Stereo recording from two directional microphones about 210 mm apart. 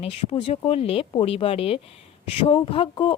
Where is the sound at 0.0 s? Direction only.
30° left (ahead or behind).